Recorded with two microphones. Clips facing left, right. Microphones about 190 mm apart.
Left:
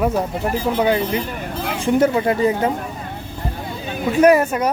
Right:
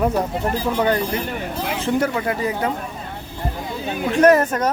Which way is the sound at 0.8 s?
10° left (ahead or behind).